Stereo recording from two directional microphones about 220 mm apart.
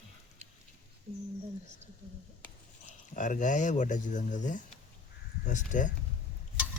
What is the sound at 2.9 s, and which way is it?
Speech, 35° left (ahead or behind).